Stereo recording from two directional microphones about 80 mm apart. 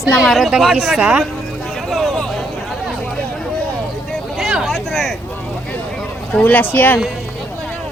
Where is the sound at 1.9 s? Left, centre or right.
Centre.